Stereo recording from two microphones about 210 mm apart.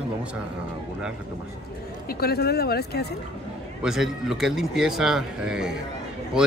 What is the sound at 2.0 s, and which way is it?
Speech, 50° left (ahead or behind).